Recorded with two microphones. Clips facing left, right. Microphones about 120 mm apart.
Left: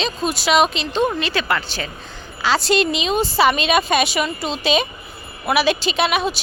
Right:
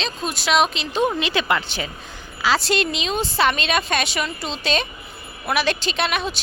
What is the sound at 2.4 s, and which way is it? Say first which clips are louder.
A woman's voice: left 3 dB; centre (ahead or behind).